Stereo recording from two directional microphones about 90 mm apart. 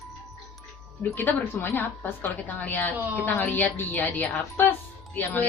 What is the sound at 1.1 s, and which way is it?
A woman's voice, 20° left (ahead or behind).